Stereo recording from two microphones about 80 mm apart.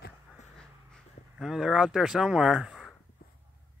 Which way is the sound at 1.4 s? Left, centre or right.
Centre.